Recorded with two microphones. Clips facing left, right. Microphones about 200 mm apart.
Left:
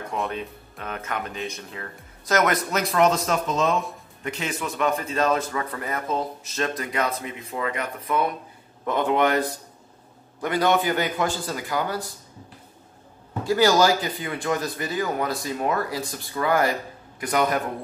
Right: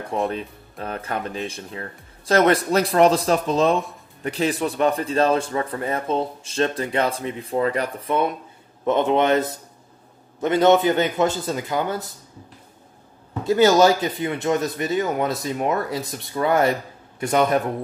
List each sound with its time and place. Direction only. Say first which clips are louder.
0.3 s a man's voice: right 3 dB; 30° right (ahead or behind)
13.4 s a man's voice: right 4 dB; 20° right (ahead or behind)